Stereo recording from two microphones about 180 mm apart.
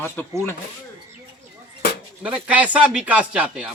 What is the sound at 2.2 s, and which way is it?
Speech, 5° right (ahead or behind).